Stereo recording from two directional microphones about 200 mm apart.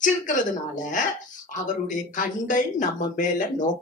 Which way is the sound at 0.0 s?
40° left (ahead or behind).